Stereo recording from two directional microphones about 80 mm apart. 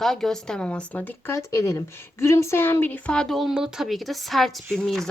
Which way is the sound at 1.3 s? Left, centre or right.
Left.